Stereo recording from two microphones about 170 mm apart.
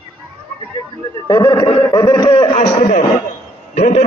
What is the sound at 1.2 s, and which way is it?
A man's voice, 20° left (ahead or behind).